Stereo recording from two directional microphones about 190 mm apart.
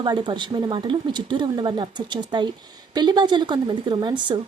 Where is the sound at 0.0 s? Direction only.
25° right (ahead or behind).